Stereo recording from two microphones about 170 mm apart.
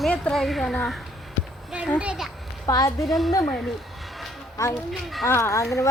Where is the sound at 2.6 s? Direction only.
20° left (ahead or behind).